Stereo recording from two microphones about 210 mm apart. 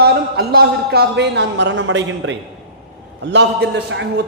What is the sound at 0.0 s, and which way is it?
Speech, 50° right (ahead or behind).